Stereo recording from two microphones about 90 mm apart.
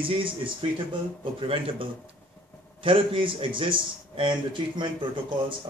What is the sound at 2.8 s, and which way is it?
A man's voice, 75° right (ahead or behind).